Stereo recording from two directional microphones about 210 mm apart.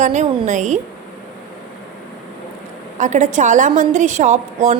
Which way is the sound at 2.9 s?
35° right (ahead or behind).